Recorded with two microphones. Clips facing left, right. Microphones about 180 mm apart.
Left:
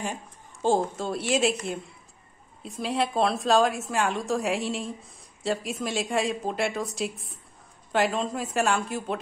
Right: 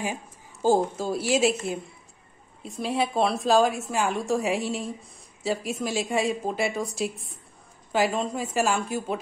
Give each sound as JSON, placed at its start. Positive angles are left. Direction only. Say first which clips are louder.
{"t": 0.0, "sound": "a woman's voice", "louder": "right 2 dB", "side_deg": -5}